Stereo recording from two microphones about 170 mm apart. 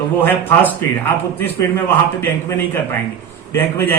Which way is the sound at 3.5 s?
15° left (ahead or behind).